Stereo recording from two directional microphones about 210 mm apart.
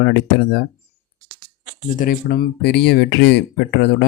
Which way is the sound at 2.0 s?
45° left (ahead or behind).